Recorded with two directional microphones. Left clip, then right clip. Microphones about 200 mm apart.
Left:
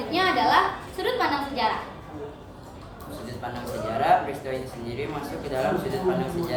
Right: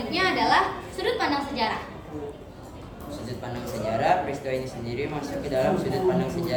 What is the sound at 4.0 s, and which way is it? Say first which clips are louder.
A man's voice: left 3 dB; centre (ahead or behind).